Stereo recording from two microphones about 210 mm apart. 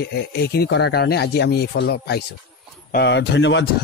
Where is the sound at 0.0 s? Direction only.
50° left (ahead or behind).